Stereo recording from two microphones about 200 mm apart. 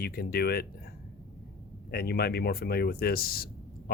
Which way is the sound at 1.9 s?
50° left (ahead or behind).